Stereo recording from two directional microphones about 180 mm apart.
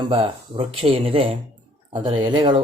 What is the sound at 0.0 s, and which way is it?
Speech, 30° right (ahead or behind).